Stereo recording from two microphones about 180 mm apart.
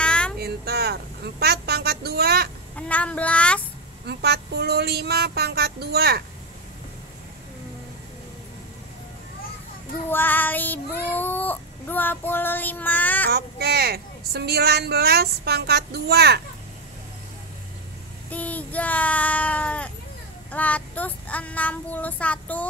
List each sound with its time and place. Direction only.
0.0 s a sound: 5° left (ahead or behind)
0.4 s speech: 60° right (ahead or behind)
2.7 s child singing: 5° left (ahead or behind)
4.0 s a woman's voice: 65° right (ahead or behind)
10.0 s child singing: 10° left (ahead or behind)
13.3 s a woman's voice: 60° right (ahead or behind)
18.3 s speech: 10° left (ahead or behind)
20.5 s child singing: 10° left (ahead or behind)